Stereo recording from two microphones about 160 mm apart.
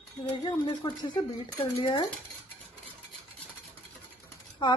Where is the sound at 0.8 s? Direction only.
30° left (ahead or behind).